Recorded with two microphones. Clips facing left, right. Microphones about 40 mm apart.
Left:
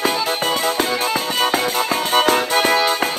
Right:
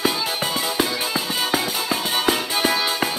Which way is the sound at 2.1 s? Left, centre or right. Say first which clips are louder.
Left 7 dB; left.